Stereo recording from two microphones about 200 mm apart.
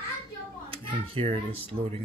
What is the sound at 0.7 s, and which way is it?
Speech, 25° right (ahead or behind).